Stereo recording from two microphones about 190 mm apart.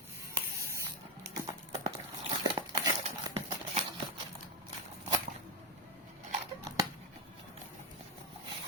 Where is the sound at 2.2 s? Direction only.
25° right (ahead or behind).